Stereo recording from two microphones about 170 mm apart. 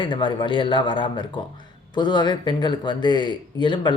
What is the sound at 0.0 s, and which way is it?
Speech, 30° left (ahead or behind).